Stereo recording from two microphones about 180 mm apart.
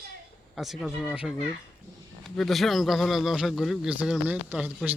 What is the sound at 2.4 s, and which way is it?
Speech, centre (ahead or behind).